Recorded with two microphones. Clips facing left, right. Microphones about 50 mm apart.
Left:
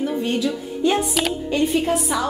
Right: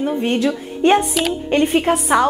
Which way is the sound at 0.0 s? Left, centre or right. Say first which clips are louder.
Right 4 dB; right.